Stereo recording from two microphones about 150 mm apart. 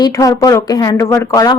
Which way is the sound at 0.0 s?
25° left (ahead or behind).